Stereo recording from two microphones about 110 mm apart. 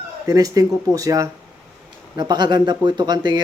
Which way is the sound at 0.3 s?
30° right (ahead or behind).